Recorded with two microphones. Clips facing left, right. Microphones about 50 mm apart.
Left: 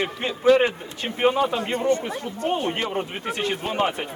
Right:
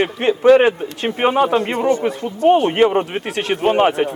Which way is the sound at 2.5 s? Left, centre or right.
Right.